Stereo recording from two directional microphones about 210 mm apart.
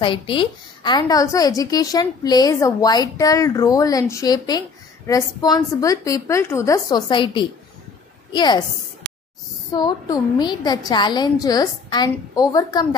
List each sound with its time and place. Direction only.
0.0 s a woman's voice: 25° left (ahead or behind)
9.8 s a woman's voice: 20° left (ahead or behind)